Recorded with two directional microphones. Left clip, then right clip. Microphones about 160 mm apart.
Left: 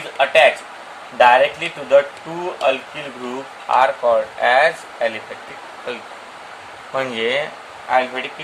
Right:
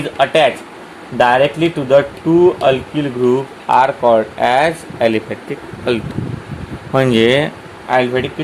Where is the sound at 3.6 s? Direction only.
70° right (ahead or behind).